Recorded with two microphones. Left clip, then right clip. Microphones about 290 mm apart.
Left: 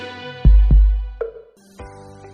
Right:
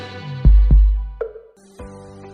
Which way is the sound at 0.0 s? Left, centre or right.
Centre.